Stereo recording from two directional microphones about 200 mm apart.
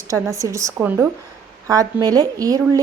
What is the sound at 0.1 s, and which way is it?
A woman's voice, 15° right (ahead or behind).